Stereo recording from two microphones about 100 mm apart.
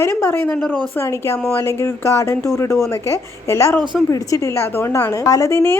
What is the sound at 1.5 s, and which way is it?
A woman's voice, 25° left (ahead or behind).